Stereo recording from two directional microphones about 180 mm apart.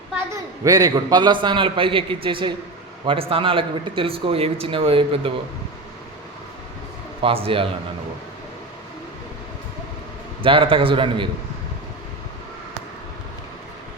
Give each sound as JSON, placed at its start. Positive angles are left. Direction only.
{"t": 0.6, "sound": "a man's voice", "side_deg": -20}
{"t": 7.2, "sound": "speech", "side_deg": -30}
{"t": 10.4, "sound": "a man's voice", "side_deg": -30}